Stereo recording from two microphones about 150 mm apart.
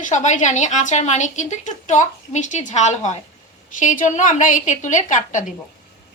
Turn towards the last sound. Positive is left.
turn(degrees=55)  # may be behind; listen again after turning